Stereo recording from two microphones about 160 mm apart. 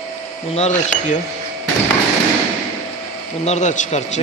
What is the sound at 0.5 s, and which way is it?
Speech, 50° left (ahead or behind).